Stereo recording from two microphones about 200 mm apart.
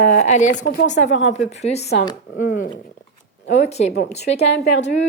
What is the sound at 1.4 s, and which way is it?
Speech, 35° left (ahead or behind).